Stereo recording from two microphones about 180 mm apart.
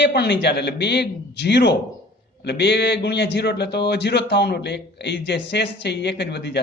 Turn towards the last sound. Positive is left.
turn(degrees=70)  # may be behind; listen again after turning